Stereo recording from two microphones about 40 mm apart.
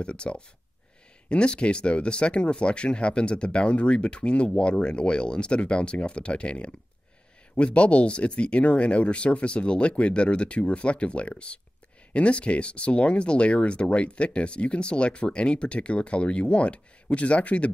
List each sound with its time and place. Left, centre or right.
0.0 s speech: left